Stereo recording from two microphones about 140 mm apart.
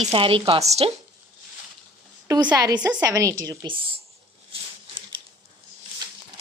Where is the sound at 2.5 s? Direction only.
30° right (ahead or behind).